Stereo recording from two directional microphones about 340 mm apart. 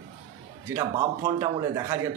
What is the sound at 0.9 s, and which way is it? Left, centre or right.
Speech, centre.